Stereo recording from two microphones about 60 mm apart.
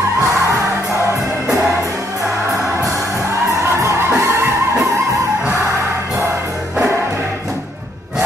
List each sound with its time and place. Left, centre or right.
3.8 s music: right